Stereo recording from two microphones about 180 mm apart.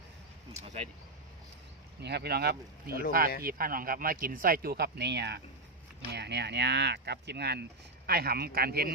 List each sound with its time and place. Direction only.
0.6 s speech: 35° right (ahead or behind)
2.0 s speech: 65° right (ahead or behind)